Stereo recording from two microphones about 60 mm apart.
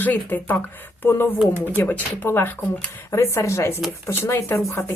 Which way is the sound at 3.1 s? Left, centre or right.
Left.